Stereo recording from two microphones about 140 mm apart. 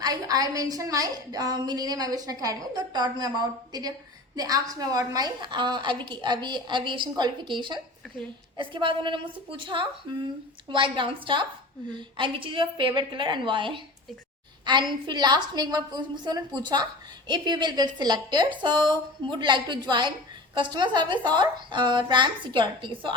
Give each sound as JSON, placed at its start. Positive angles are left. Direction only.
{"t": 0.0, "sound": "a woman's voice", "side_deg": -25}